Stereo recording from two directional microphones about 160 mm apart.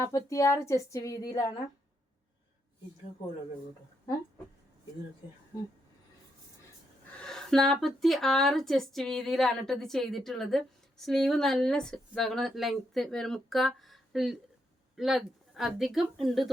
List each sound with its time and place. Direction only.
0.0 s speech: 20° left (ahead or behind)
7.2 s speech: 5° left (ahead or behind)